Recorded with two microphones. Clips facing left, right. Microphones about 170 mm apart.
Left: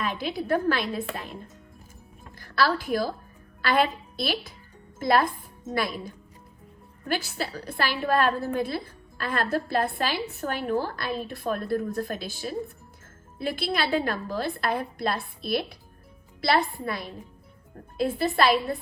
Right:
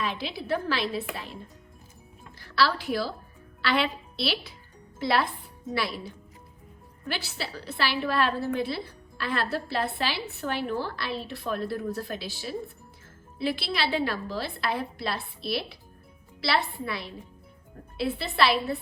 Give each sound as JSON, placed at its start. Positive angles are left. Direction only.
{"t": 0.0, "sound": "a woman's voice", "side_deg": 50}
{"t": 2.4, "sound": "a woman's voice", "side_deg": 50}